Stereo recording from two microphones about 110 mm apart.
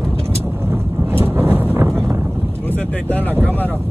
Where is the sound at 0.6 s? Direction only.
20° right (ahead or behind).